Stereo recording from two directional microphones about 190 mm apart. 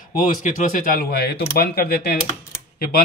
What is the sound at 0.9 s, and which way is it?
Speech, 55° left (ahead or behind).